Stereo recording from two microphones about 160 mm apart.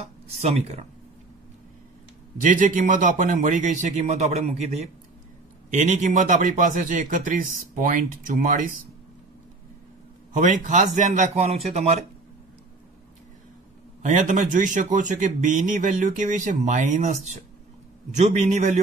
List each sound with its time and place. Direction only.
0.0 s speech: 40° right (ahead or behind)
2.4 s a man's voice: 55° right (ahead or behind)
10.3 s a man's voice: 50° right (ahead or behind)
14.0 s a man's voice: 55° right (ahead or behind)